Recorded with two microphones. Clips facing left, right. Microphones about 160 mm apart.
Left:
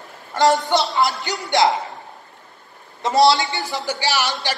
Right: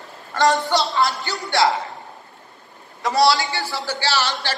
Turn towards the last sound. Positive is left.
turn(degrees=15)  # may be behind; listen again after turning